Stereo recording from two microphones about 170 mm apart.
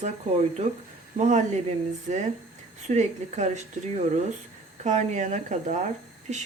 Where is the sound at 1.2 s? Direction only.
45° right (ahead or behind).